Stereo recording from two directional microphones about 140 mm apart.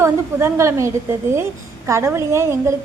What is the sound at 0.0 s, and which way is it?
A woman's voice, 20° right (ahead or behind).